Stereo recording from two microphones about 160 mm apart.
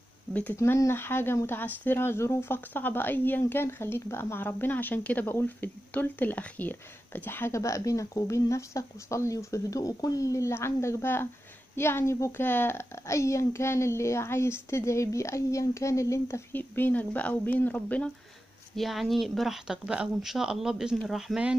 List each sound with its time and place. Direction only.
0.3 s speech: 10° left (ahead or behind)